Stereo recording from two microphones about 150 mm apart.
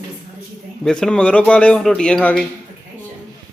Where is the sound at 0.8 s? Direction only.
5° left (ahead or behind).